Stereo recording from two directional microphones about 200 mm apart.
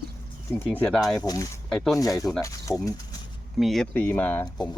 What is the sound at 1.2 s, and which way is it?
Speech, 15° left (ahead or behind).